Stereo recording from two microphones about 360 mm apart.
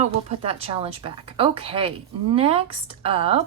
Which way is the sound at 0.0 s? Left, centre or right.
Centre.